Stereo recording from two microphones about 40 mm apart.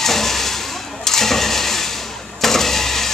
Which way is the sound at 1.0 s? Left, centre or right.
Centre.